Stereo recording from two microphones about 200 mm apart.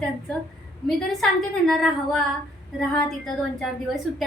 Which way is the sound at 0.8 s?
Centre (ahead or behind).